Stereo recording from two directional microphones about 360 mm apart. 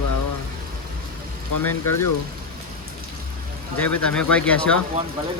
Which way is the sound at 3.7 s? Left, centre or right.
Centre.